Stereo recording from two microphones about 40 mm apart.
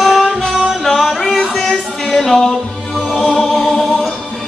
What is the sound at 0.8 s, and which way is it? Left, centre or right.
Music, centre.